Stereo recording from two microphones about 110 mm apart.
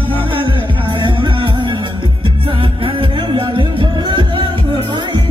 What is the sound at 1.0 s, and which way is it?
Music, 50° right (ahead or behind).